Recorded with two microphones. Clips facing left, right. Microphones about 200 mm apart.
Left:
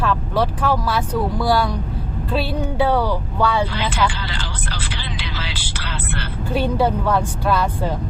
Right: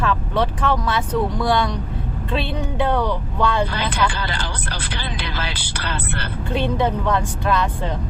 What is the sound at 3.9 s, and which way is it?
Speech, 60° right (ahead or behind).